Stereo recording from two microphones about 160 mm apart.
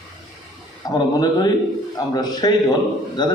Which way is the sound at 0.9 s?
25° left (ahead or behind).